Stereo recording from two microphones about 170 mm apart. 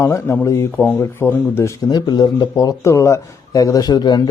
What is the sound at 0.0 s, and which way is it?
Speech, 15° left (ahead or behind).